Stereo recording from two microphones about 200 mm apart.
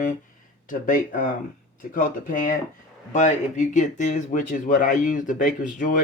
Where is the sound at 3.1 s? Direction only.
40° left (ahead or behind).